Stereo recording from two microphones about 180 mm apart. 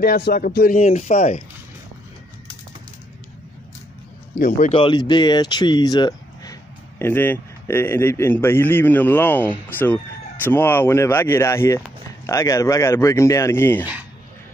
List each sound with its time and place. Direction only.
0.0 s speech: 55° left (ahead or behind)
0.7 s speech: 40° left (ahead or behind)
4.4 s speech: 45° left (ahead or behind)
4.7 s speech: 25° left (ahead or behind)